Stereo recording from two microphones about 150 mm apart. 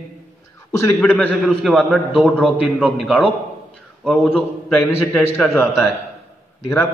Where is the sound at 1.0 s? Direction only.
Centre (ahead or behind).